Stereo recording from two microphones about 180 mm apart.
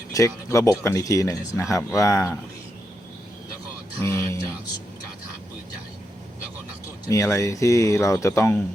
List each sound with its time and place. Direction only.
0.1 s speech: 15° left (ahead or behind)
4.0 s speech: 15° left (ahead or behind)
7.1 s speech: 15° left (ahead or behind)